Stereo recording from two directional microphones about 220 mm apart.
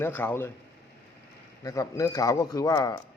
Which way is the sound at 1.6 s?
15° left (ahead or behind).